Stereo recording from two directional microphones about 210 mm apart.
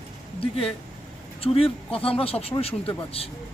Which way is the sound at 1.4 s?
25° left (ahead or behind).